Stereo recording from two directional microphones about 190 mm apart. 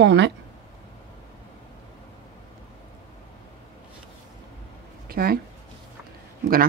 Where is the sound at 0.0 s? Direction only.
70° right (ahead or behind).